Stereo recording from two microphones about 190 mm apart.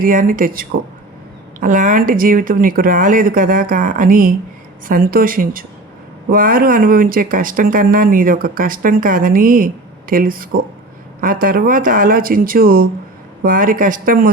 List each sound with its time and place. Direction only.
0.0 s speech: 45° right (ahead or behind)